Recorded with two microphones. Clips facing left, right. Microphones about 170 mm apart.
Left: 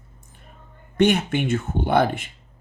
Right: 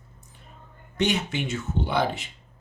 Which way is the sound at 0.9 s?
55° left (ahead or behind).